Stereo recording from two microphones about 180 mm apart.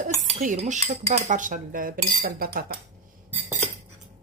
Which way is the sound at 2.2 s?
55° right (ahead or behind).